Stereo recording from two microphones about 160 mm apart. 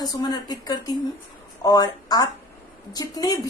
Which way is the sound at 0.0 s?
25° left (ahead or behind).